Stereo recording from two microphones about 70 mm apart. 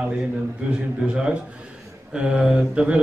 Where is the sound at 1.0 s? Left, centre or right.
Centre.